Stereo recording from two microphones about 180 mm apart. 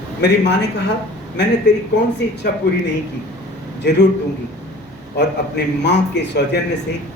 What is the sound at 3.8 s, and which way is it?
Speech, 75° left (ahead or behind).